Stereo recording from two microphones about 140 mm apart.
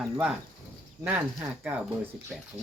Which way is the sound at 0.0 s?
10° right (ahead or behind).